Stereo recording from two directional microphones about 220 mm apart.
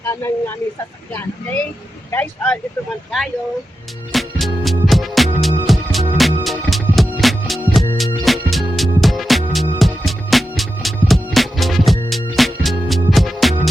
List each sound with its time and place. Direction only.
0.0 s speech: 10° left (ahead or behind)
4.1 s music: centre (ahead or behind)